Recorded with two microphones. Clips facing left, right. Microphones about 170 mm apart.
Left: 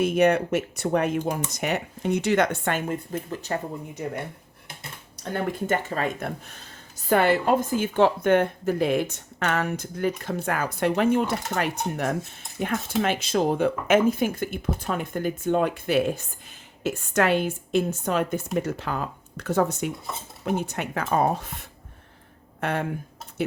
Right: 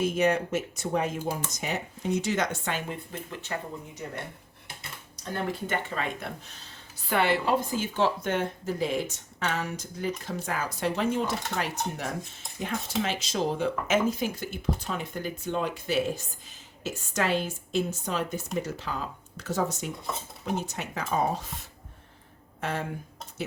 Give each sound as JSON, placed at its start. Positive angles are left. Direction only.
{"t": 0.0, "sound": "speech", "side_deg": 65}
{"t": 5.6, "sound": "speech", "side_deg": 45}